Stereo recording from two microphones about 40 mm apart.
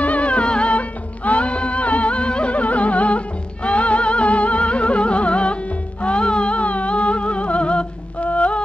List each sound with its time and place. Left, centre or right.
0.0 s music: left